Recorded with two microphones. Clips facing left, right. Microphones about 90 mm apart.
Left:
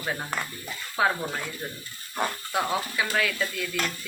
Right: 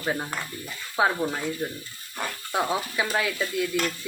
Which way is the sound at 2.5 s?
25° right (ahead or behind).